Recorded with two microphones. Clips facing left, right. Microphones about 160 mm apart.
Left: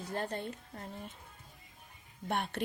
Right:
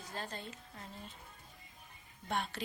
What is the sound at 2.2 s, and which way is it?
Speech, 60° left (ahead or behind).